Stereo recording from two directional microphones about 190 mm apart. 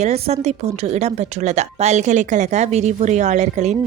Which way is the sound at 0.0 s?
35° right (ahead or behind).